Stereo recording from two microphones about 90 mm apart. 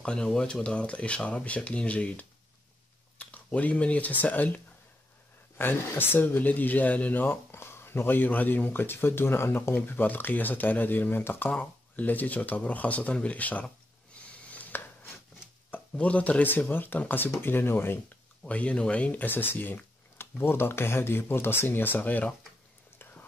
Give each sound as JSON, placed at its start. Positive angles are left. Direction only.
{"t": 0.0, "sound": "speech", "side_deg": 10}
{"t": 5.6, "sound": "speech", "side_deg": 25}
{"t": 14.2, "sound": "a sound", "side_deg": 15}
{"t": 14.5, "sound": "chopping", "side_deg": 20}
{"t": 15.7, "sound": "speech", "side_deg": 15}
{"t": 18.4, "sound": "speech", "side_deg": 15}